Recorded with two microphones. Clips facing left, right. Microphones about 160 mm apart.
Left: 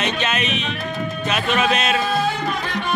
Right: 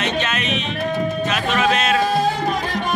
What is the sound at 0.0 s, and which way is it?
Music, 15° left (ahead or behind).